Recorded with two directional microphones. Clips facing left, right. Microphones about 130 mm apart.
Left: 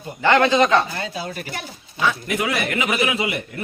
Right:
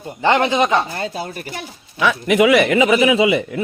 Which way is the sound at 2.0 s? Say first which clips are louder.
Right 7 dB; 90° right.